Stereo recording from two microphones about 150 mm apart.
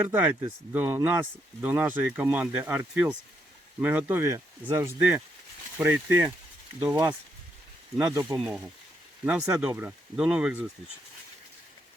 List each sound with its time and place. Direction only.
0.0 s speech: 10° right (ahead or behind)
6.9 s speech: 30° right (ahead or behind); by 10.7 s 5° right (ahead or behind)